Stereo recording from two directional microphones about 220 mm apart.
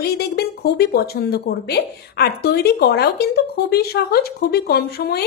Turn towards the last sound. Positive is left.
turn(degrees=45)  # may be behind; listen again after turning